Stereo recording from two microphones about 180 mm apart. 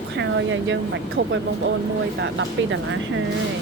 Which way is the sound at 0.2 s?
90° right.